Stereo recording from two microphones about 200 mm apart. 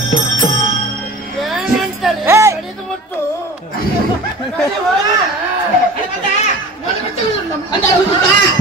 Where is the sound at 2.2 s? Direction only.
15° right (ahead or behind).